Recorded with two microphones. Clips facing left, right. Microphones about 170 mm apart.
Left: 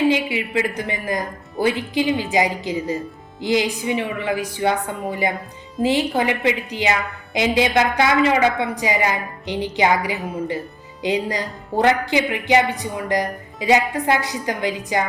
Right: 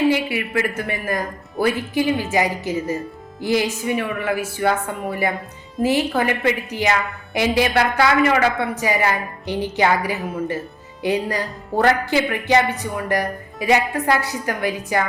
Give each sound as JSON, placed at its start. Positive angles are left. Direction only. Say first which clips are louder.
{"t": 0.1, "sound": "speech", "louder": "even", "side_deg": 15}